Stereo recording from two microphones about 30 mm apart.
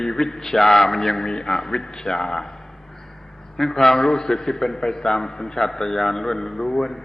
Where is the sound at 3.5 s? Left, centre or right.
Centre.